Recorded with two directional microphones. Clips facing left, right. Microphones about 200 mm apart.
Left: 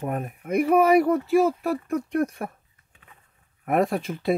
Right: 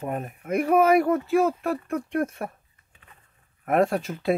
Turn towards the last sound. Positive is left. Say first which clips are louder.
# even
turn(degrees=0)  # may be behind; listen again after turning